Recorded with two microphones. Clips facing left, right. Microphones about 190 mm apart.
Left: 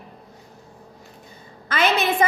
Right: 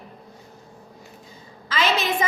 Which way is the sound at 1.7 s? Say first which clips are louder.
Left 2 dB; 55° left (ahead or behind).